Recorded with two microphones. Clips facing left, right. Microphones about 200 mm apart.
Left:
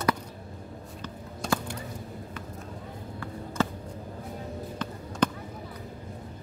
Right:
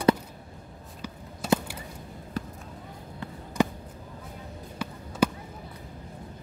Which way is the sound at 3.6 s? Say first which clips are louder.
Right 3 dB; 15° right (ahead or behind).